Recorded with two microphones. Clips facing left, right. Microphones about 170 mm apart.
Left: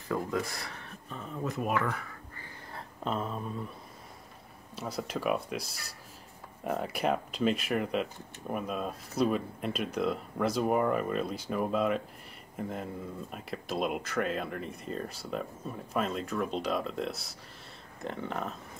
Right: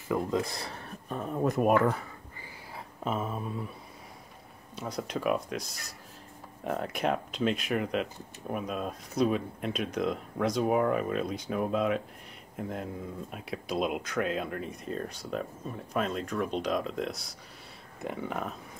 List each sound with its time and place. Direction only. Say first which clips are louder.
0.1 s speech: right 3 dB; 20° right (ahead or behind)
1.0 s speech: right 7 dB; 50° right (ahead or behind)
2.3 s a sound: even; 5° right (ahead or behind)
4.7 s speech: right 1 dB; 5° left (ahead or behind)
6.6 s speech: even; centre (ahead or behind)